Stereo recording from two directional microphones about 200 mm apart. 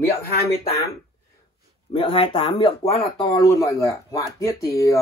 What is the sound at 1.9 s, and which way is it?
Speech, 25° left (ahead or behind).